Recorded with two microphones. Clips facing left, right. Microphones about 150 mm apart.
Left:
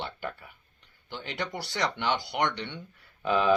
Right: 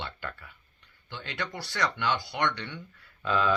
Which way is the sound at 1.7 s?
25° left (ahead or behind).